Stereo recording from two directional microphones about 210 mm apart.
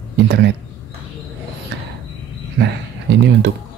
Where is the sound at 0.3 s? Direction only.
55° right (ahead or behind).